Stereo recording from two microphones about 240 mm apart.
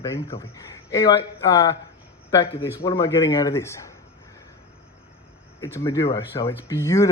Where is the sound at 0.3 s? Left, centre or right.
Centre.